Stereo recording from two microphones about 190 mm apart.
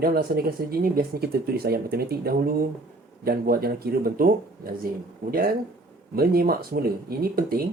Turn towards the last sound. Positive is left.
turn(degrees=-50)  # may be behind; listen again after turning